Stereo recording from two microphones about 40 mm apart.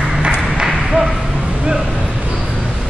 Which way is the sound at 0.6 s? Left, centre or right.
Centre.